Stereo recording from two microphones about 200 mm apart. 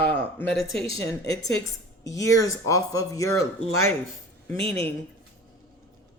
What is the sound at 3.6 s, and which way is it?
Speech, 90° left.